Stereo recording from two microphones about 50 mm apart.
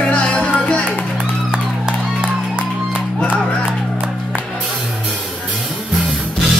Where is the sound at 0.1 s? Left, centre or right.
Left.